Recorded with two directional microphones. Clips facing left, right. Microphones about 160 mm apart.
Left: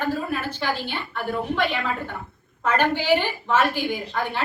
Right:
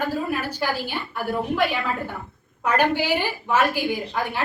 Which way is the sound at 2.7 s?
10° right (ahead or behind).